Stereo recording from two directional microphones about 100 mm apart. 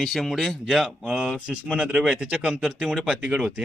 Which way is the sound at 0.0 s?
Centre (ahead or behind).